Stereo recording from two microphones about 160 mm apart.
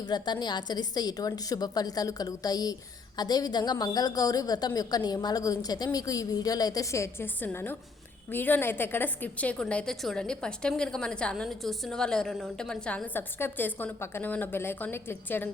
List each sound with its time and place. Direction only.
0.0 s a woman's voice: 25° left (ahead or behind)